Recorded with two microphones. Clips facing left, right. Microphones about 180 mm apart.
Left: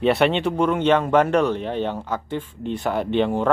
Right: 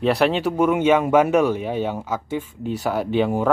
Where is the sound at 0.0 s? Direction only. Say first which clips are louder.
Even; centre (ahead or behind).